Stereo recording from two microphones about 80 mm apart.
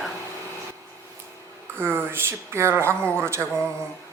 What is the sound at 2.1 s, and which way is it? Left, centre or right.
Speech, right.